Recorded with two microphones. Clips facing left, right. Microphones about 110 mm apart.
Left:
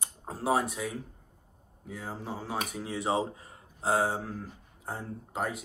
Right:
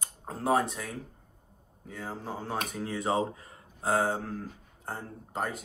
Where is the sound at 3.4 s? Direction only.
30° left (ahead or behind).